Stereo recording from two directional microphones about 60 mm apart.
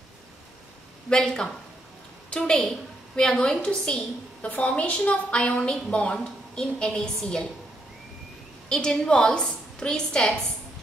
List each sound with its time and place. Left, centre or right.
1.1 s a woman's voice: centre
8.6 s a woman's voice: centre